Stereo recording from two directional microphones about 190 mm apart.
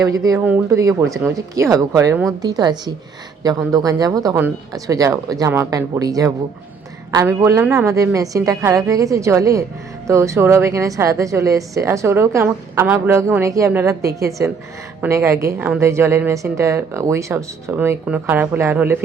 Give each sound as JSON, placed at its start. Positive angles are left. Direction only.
{"t": 0.0, "sound": "a woman's voice", "side_deg": -20}